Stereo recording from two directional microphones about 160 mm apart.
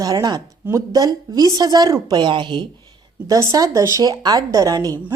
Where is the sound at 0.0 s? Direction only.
25° right (ahead or behind).